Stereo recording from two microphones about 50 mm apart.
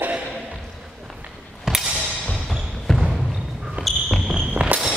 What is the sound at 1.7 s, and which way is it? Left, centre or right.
Music, centre.